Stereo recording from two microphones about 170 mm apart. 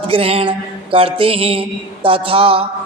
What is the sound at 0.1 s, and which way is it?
A woman's voice, 35° right (ahead or behind).